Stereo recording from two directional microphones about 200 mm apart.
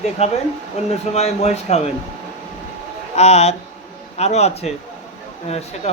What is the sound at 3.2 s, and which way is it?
A man's voice, 35° left (ahead or behind).